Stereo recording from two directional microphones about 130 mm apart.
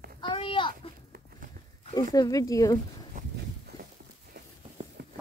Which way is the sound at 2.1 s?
30° left (ahead or behind).